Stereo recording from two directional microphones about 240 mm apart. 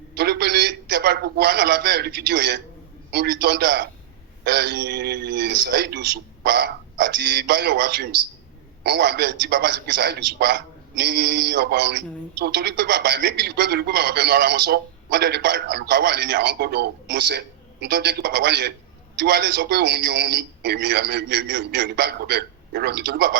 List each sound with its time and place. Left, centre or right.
0.1 s a man's voice: right